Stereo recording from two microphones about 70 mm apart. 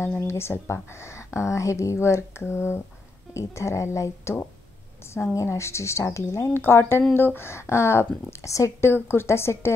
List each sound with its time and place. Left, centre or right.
0.3 s a woman's voice: left
8.9 s speech: left